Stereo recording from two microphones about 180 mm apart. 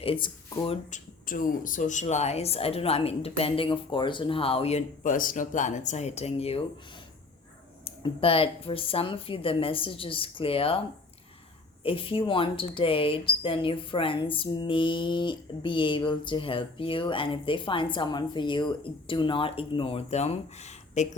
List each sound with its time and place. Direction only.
0.0 s speech: 30° left (ahead or behind)
0.9 s speech: 45° left (ahead or behind)
7.9 s speech: 30° left (ahead or behind)
11.8 s speech: 30° left (ahead or behind)